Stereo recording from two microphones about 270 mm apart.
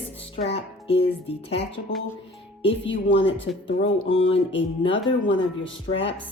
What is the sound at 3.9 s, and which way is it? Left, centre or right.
Speech, centre.